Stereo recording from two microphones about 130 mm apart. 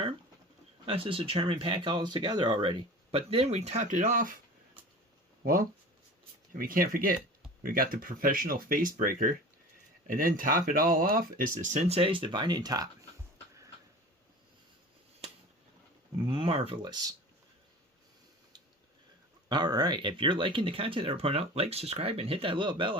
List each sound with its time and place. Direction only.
0.9 s speech: 45° right (ahead or behind); by 4.3 s 80° right
6.5 s speech: 90° right; by 13.1 s 30° right (ahead or behind)
16.1 s speech: 40° right (ahead or behind)
19.5 s speech: 35° right (ahead or behind)